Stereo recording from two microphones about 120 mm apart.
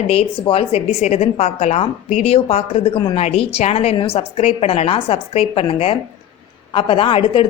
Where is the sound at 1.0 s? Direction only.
70° left (ahead or behind).